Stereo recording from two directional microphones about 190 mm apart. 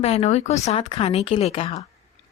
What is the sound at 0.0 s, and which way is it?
Speech, 35° left (ahead or behind).